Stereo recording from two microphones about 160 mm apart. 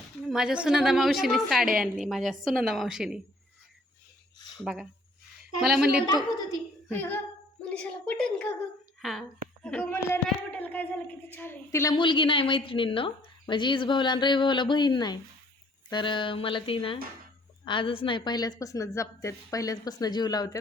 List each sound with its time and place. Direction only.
0.3 s a woman's voice: 5° right (ahead or behind)
4.6 s a woman's voice: centre (ahead or behind)
6.2 s a sound: 25° left (ahead or behind)
6.8 s child singing: 10° left (ahead or behind)
7.7 s a sound: 5° left (ahead or behind)
9.6 s a woman's voice: 10° left (ahead or behind)
10.2 s a sound: 10° left (ahead or behind)
11.3 s a woman's voice: 15° left (ahead or behind)
11.9 s a woman's voice: 30° left (ahead or behind)